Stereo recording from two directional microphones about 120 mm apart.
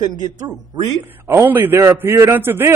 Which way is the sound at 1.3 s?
15° right (ahead or behind).